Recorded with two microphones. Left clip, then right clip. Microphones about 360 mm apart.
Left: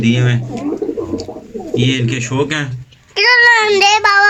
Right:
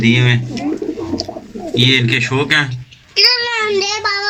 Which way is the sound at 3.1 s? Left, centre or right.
Left.